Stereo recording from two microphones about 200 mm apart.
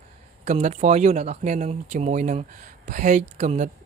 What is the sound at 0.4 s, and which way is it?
Speech, 35° right (ahead or behind).